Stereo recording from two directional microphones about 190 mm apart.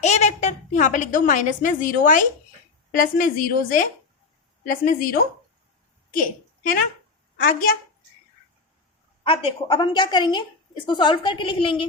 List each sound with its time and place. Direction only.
0.0 s a woman's voice: 35° left (ahead or behind)
9.2 s a woman's voice: 30° left (ahead or behind)